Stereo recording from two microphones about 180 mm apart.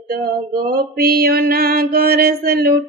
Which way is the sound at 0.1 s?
55° right (ahead or behind).